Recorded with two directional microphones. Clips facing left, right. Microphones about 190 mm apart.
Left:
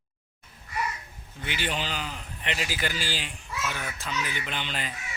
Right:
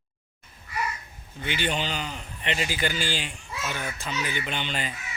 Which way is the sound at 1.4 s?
Centre (ahead or behind).